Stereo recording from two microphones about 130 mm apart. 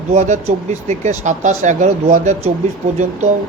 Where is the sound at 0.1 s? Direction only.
60° right (ahead or behind).